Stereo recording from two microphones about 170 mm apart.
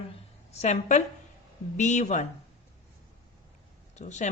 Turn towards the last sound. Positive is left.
turn(degrees=45)  # may be behind; listen again after turning